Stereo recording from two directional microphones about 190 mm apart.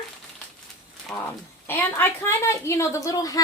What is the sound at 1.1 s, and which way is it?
A woman's voice, 10° left (ahead or behind).